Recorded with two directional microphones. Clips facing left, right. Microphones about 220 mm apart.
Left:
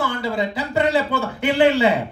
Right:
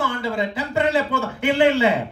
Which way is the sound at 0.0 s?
35° left (ahead or behind).